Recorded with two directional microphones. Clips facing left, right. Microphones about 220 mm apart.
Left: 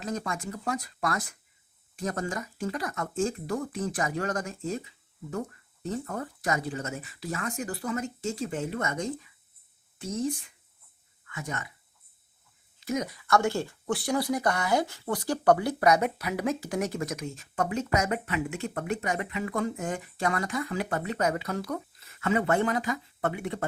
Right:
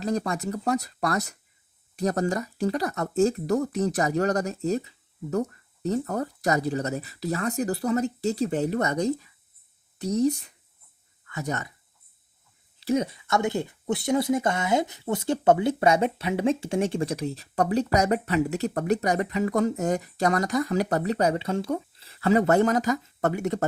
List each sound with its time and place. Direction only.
0.0 s speech: 35° right (ahead or behind)
12.8 s speech: 30° right (ahead or behind)